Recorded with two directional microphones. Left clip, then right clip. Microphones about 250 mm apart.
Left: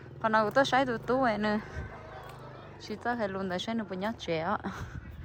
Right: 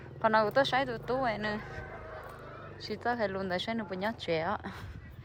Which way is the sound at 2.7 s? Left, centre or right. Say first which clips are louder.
Right 1 dB; centre.